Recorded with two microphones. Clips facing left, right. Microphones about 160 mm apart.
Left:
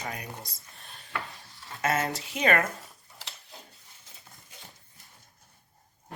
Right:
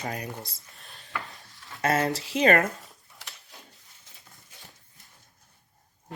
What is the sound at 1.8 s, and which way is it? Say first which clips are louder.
Speech: right 3 dB; 35° right (ahead or behind).